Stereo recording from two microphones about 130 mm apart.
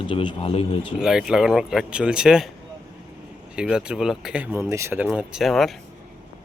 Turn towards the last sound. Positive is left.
turn(degrees=0)  # may be behind; listen again after turning